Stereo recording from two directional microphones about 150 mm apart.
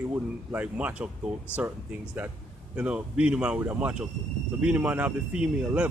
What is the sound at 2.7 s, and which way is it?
Speech, 10° right (ahead or behind).